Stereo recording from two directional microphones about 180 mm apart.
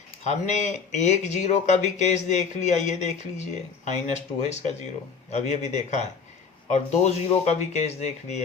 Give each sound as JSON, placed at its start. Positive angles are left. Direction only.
{"t": 0.3, "sound": "speech", "side_deg": 40}